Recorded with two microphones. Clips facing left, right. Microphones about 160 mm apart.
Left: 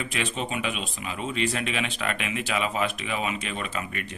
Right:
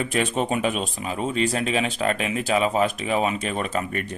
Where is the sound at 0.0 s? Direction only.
45° right (ahead or behind).